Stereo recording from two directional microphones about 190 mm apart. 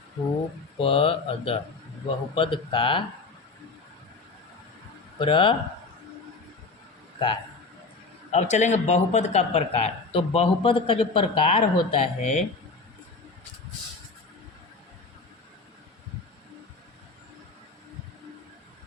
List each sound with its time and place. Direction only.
0.8 s a man's voice: 30° left (ahead or behind)
5.2 s a man's voice: 25° left (ahead or behind)
8.3 s speech: 35° left (ahead or behind)